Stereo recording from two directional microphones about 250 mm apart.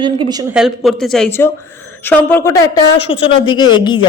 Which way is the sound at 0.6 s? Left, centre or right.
Centre.